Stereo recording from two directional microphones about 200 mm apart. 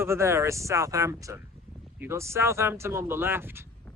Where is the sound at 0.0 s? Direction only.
15° right (ahead or behind).